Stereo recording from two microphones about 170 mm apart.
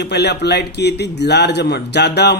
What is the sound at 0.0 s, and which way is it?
A man's voice, 80° left.